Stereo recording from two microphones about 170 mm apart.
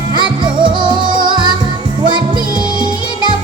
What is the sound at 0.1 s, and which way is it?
Music, 30° right (ahead or behind).